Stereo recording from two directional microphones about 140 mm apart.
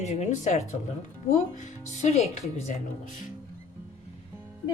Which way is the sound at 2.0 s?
50° left (ahead or behind).